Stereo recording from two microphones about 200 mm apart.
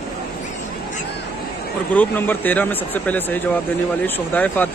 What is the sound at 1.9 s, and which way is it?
Speech, 10° left (ahead or behind).